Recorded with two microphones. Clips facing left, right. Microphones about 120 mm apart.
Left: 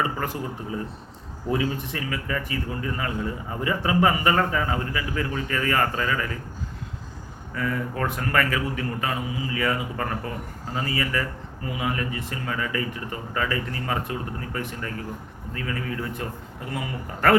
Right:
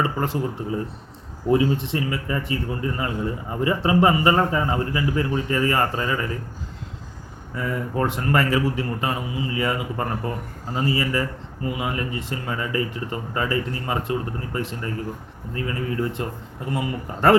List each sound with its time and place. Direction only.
0.0 s a man's voice: 30° right (ahead or behind)
7.5 s a man's voice: 20° right (ahead or behind)